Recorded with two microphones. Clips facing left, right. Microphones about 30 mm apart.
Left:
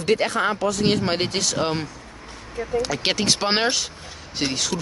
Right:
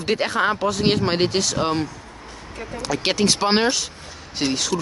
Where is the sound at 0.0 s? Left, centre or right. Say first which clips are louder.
Even; centre.